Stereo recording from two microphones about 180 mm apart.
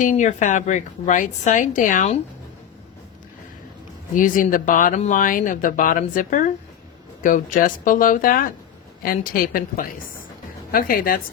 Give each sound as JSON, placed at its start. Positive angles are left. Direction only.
{"t": 0.0, "sound": "speech", "side_deg": 45}
{"t": 4.1, "sound": "speech", "side_deg": 45}